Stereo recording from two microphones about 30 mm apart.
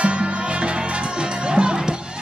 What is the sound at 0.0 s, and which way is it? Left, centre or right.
Music, right.